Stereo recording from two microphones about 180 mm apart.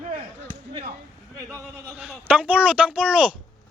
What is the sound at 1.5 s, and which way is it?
A man's voice, 10° right (ahead or behind).